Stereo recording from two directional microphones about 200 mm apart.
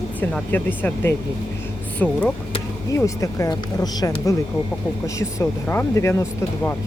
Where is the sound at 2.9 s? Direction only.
15° left (ahead or behind).